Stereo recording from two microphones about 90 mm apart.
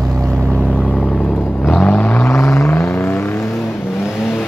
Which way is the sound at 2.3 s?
30° left (ahead or behind).